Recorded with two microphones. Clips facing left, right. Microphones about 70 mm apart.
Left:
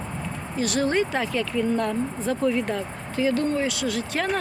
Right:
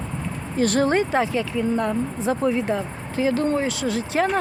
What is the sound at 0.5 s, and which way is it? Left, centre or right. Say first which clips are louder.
Speech: right 4 dB; right.